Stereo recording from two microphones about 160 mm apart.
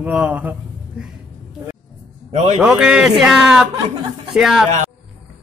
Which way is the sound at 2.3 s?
45° right (ahead or behind).